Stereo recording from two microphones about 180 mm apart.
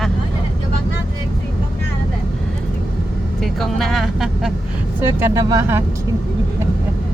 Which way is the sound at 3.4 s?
Centre (ahead or behind).